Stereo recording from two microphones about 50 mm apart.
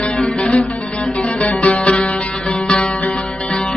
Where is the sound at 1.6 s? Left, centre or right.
Left.